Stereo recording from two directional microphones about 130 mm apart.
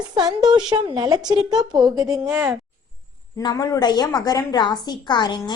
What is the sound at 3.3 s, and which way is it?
A woman's voice, 25° left (ahead or behind).